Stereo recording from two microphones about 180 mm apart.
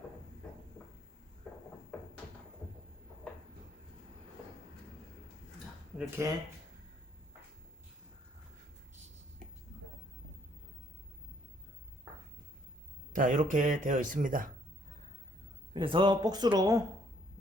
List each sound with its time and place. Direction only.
6.0 s speech: 15° right (ahead or behind)
13.1 s speech: 45° right (ahead or behind)
15.7 s speech: 30° right (ahead or behind)